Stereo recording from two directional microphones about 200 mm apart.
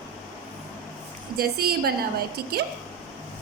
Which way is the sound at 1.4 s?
50° right (ahead or behind).